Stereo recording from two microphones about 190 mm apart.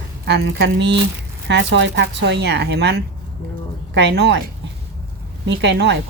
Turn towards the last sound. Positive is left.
turn(degrees=-65)  # may be behind; listen again after turning